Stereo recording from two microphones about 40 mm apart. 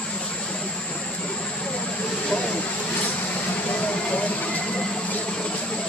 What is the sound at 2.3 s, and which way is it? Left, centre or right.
Vehicle, left.